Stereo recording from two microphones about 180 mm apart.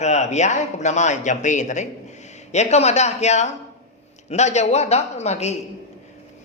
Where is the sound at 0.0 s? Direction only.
40° left (ahead or behind).